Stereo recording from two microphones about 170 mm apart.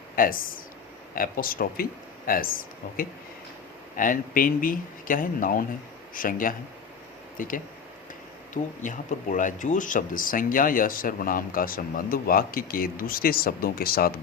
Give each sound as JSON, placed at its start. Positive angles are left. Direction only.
{"t": 0.2, "sound": "speech", "side_deg": 55}
{"t": 8.8, "sound": "speech", "side_deg": 50}